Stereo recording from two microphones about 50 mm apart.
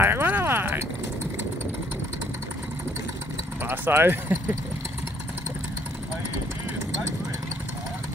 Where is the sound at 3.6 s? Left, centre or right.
Right.